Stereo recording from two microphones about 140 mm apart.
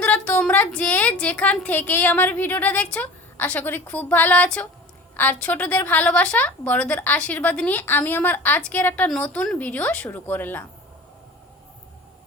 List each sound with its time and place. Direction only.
0.0 s a woman's voice: 10° left (ahead or behind)